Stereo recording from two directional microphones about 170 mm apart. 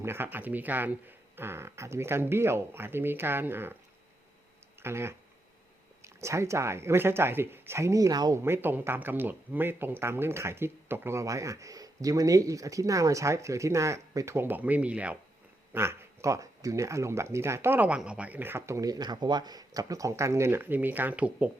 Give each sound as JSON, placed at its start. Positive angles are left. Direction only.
{"t": 0.0, "sound": "speech", "side_deg": -15}
{"t": 4.8, "sound": "speech", "side_deg": -15}